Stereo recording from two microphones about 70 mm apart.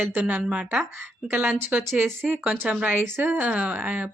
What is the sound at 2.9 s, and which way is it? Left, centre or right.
Speech, right.